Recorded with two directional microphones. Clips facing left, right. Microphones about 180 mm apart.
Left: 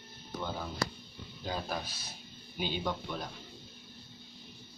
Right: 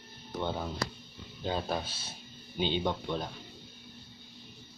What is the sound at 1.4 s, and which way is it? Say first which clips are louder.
Speech: right 4 dB; 25° right (ahead or behind).